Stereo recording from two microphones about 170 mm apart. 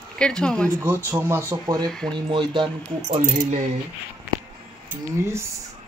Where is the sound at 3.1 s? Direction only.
45° right (ahead or behind).